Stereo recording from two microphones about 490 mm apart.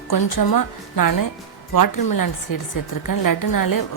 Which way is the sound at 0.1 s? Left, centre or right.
Left.